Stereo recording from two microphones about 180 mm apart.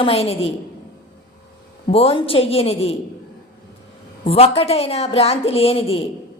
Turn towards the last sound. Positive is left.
turn(degrees=35)  # may be behind; listen again after turning